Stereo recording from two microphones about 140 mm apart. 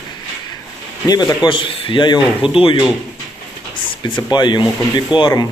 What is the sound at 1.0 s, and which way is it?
Speech, 30° left (ahead or behind).